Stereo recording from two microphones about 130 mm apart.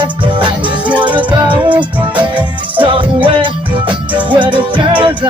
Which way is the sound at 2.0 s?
10° right (ahead or behind).